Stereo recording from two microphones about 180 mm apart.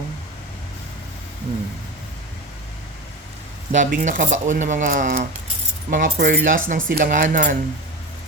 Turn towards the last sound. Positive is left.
turn(degrees=-50)  # may be behind; listen again after turning